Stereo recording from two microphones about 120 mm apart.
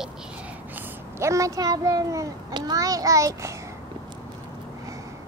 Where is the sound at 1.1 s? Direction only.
25° right (ahead or behind).